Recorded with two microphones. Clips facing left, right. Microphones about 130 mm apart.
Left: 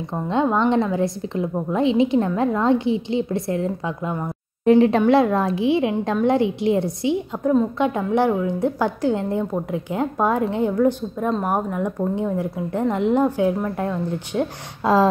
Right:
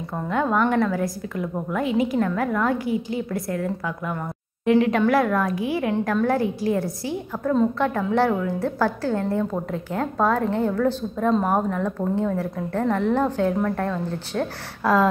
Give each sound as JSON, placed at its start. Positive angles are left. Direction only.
{"t": 0.1, "sound": "a woman's voice", "side_deg": 20}